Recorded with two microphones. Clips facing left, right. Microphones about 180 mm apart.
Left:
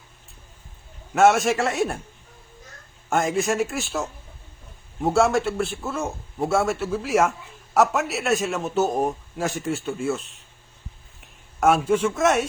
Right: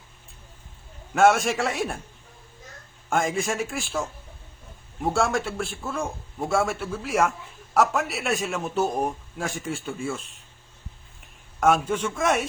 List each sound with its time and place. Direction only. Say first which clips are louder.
1.1 s a man's voice: left 2 dB; centre (ahead or behind)
3.1 s a man's voice: left 3 dB; centre (ahead or behind)
5.0 s a man's voice: left 4 dB; centre (ahead or behind)